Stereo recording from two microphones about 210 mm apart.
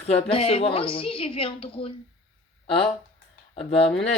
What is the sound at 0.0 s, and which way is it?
A woman's voice, 30° left (ahead or behind).